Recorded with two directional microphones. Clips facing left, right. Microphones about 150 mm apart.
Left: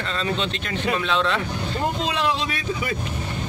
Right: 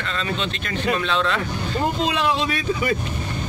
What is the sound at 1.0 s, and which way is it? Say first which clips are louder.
Speech: even; 20° left (ahead or behind).